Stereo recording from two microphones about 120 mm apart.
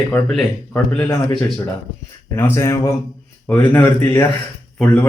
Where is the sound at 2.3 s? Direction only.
20° left (ahead or behind).